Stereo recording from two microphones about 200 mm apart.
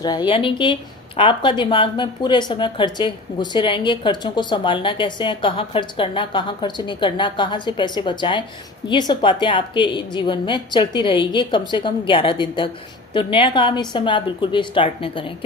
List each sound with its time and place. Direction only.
0.0 s a woman's voice: 20° left (ahead or behind)